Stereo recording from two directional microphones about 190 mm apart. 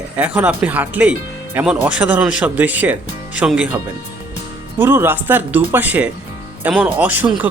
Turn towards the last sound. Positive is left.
turn(degrees=-10)  # may be behind; listen again after turning